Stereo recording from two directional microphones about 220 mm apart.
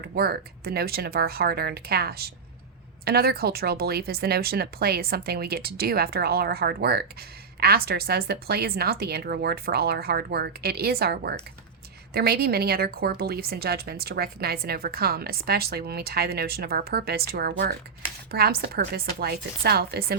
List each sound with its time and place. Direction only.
0.0 s speech: 45° right (ahead or behind)